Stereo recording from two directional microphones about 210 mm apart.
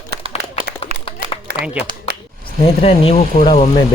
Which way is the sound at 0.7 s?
55° right (ahead or behind).